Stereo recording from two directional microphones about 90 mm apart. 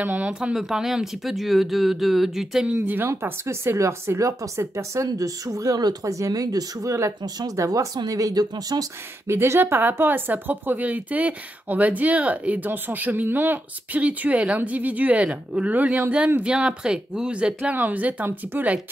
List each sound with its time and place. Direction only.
0.0 s speech: 15° right (ahead or behind)
2.8 s speech: 20° right (ahead or behind); by 8.8 s 45° right (ahead or behind)
9.3 s speech: 25° right (ahead or behind)